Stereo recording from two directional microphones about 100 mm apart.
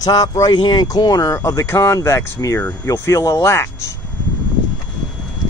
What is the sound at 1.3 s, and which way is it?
Speech, 30° left (ahead or behind).